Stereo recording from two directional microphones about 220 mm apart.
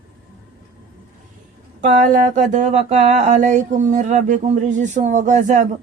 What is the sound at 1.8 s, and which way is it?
Speech, 35° right (ahead or behind).